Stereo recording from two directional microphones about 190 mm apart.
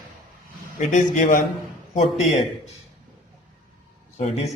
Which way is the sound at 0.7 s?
45° left (ahead or behind).